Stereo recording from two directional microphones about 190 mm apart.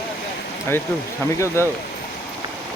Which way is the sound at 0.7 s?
15° left (ahead or behind).